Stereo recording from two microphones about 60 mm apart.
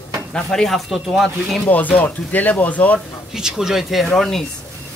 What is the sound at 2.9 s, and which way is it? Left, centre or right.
Speech, centre.